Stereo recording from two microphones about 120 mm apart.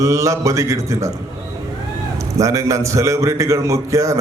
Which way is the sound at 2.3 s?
25° right (ahead or behind).